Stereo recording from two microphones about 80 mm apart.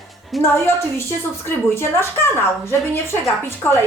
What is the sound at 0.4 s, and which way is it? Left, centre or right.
Speech, centre.